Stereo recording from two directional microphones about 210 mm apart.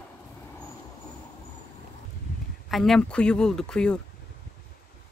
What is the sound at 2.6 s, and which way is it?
Speech, centre (ahead or behind).